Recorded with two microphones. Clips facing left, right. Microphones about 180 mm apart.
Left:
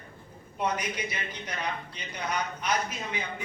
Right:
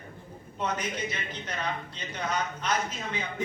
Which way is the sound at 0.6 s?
10° left (ahead or behind).